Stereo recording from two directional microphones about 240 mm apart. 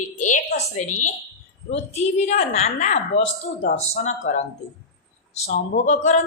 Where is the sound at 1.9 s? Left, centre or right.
Left.